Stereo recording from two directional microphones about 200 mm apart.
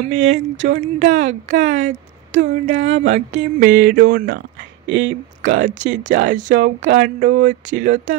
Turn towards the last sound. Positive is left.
turn(degrees=-40)  # may be behind; listen again after turning